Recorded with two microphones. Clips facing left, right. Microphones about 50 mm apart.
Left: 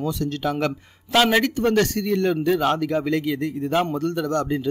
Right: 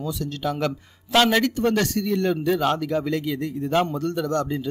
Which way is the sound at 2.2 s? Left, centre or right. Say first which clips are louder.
Left 2 dB; centre.